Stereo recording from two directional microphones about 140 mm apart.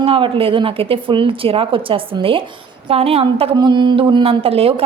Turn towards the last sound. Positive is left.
turn(degrees=-45)  # may be behind; listen again after turning